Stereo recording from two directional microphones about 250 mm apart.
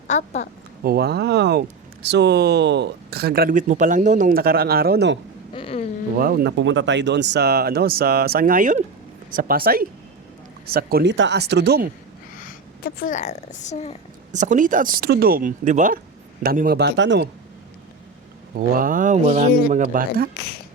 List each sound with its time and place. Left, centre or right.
0.1 s a woman's voice: left
0.9 s speech: right
5.5 s insect: left
6.1 s speech: right
12.4 s a woman's voice: left
14.3 s speech: right
18.5 s a sound: right
19.7 s speech: right
20.3 s speech: left